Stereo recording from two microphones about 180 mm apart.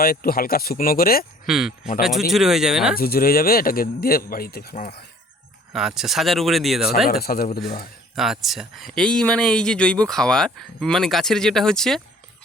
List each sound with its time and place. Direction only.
0.0 s speech: 55° left (ahead or behind)
1.5 s speech: centre (ahead or behind)
2.9 s speech: 55° left (ahead or behind)
5.7 s speech: 5° right (ahead or behind)
7.1 s speech: 60° left (ahead or behind)
8.1 s speech: centre (ahead or behind)